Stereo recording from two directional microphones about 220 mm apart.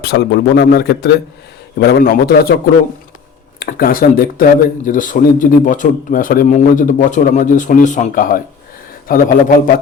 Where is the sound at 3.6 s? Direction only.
40° left (ahead or behind).